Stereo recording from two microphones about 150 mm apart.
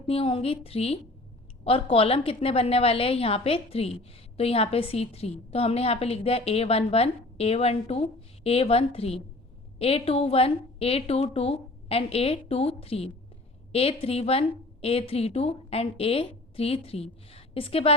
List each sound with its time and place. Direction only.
0.1 s a woman's voice: 40° left (ahead or behind)